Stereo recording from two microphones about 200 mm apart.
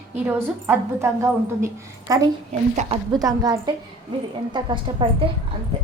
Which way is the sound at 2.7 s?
35° right (ahead or behind).